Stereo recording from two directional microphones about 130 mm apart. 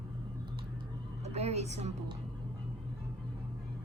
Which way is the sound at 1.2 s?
55° right (ahead or behind).